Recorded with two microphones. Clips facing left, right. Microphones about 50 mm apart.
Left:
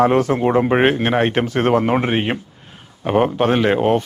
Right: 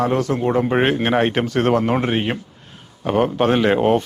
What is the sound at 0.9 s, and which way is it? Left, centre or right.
Speech, centre.